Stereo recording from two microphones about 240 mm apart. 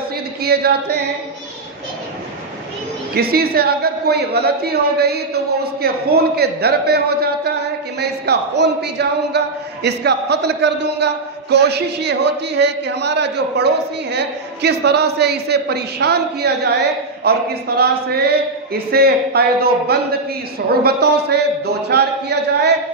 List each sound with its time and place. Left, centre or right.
0.4 s a woman's voice: right
3.2 s a woman's voice: right